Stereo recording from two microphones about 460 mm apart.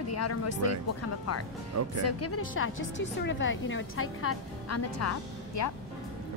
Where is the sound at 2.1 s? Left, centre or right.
Left.